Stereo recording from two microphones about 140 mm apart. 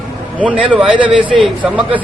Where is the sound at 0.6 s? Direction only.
5° right (ahead or behind).